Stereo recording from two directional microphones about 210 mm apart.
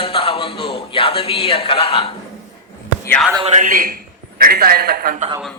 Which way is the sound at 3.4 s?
35° right (ahead or behind).